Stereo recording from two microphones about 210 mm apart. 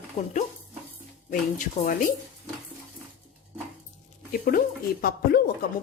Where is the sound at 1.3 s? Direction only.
40° left (ahead or behind).